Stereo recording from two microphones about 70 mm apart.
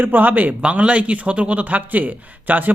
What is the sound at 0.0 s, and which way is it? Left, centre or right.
Speech, right.